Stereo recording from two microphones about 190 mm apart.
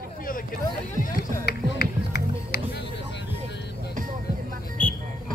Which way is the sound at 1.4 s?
55° left (ahead or behind).